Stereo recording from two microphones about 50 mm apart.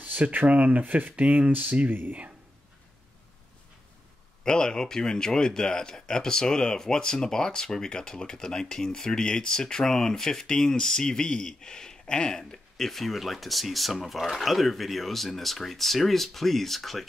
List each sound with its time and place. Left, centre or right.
0.0 s speech: right
4.5 s speech: centre